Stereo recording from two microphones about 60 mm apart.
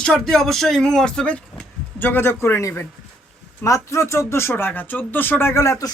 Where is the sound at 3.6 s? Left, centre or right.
Left.